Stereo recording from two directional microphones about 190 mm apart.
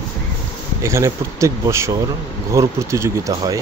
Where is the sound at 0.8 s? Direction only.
15° right (ahead or behind).